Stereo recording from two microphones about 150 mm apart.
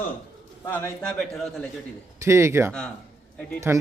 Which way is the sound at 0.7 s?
10° left (ahead or behind).